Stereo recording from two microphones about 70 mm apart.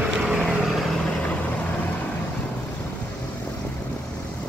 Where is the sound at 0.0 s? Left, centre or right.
Centre.